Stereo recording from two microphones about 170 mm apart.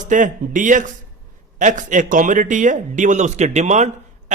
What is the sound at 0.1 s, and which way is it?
A man's voice, 50° right (ahead or behind).